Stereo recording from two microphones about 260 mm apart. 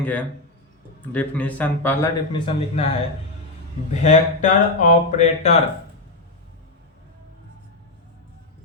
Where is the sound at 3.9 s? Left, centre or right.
Left.